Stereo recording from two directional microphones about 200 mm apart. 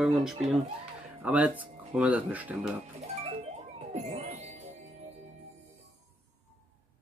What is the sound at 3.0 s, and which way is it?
Music, 30° right (ahead or behind).